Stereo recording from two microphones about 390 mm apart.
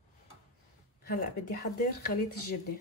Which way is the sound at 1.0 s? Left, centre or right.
Left.